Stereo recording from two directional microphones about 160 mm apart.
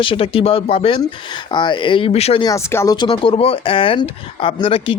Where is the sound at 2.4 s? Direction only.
20° left (ahead or behind).